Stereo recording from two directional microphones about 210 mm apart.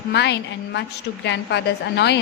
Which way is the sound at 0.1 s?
55° left (ahead or behind).